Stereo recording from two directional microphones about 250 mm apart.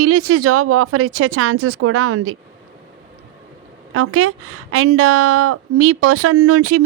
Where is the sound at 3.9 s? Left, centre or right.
Right.